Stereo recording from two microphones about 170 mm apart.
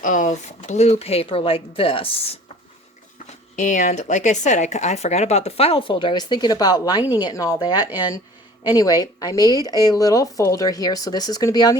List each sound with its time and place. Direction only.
0.0 s speech: 50° left (ahead or behind); by 2.4 s 30° left (ahead or behind)
3.5 s a woman's voice: 50° left (ahead or behind); by 11.8 s 20° left (ahead or behind)